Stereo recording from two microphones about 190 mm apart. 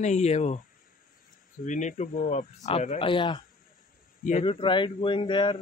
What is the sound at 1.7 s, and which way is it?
A man's voice, 40° left (ahead or behind).